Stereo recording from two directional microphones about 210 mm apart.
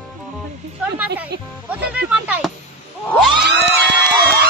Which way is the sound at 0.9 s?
5° right (ahead or behind).